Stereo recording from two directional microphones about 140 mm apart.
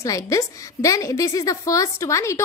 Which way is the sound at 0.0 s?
20° left (ahead or behind).